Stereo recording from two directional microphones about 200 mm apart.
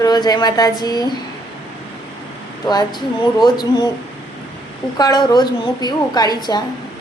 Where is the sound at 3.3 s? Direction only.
20° left (ahead or behind).